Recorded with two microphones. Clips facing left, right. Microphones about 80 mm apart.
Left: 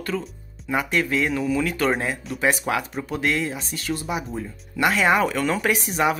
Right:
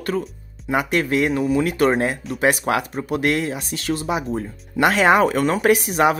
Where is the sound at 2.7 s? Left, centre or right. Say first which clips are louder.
Right 4 dB; right.